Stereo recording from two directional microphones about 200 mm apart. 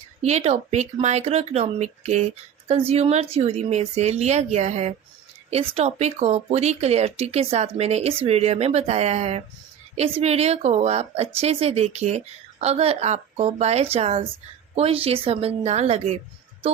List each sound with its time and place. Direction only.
0.2 s a woman's voice: 30° right (ahead or behind)